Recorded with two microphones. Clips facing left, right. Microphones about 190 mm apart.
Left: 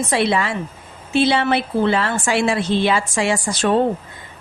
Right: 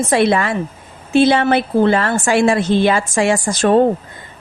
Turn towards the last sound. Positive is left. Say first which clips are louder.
# right 5 dB
turn(degrees=-45)  # may be behind; listen again after turning